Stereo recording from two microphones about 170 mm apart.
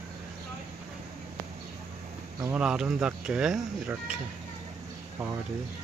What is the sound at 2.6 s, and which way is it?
Speech, 5° right (ahead or behind).